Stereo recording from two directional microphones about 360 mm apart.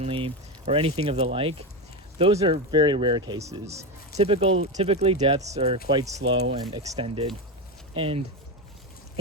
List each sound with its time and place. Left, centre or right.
0.0 s speech: centre